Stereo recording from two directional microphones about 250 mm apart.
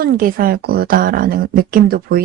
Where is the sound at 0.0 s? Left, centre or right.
Right.